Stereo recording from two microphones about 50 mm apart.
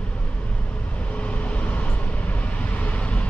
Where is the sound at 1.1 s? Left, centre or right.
Left.